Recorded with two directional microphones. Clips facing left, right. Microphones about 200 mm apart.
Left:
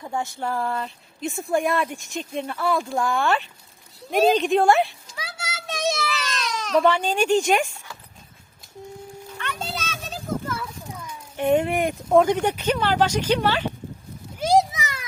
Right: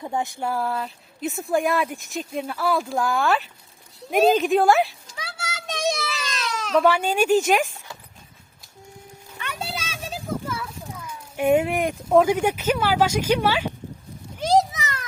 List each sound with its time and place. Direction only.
0.0 s a woman's voice: 20° right (ahead or behind); by 4.9 s centre (ahead or behind)
6.1 s baby cry: 5° right (ahead or behind)
9.4 s children playing: 10° right (ahead or behind)
14.3 s a sound: 10° left (ahead or behind)